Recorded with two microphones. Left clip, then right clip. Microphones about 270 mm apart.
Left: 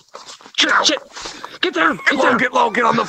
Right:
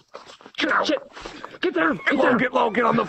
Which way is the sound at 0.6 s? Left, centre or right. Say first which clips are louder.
Left 7 dB; left.